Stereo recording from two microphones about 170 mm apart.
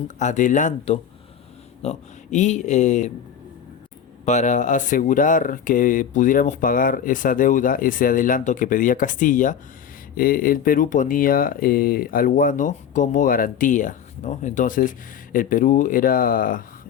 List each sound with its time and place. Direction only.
0.2 s speech: 45° left (ahead or behind)
4.3 s speech: 45° left (ahead or behind)